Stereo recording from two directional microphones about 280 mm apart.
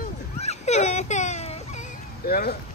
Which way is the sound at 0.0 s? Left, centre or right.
Left.